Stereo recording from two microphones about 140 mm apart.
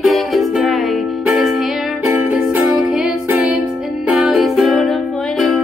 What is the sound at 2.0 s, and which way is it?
Music, 20° right (ahead or behind).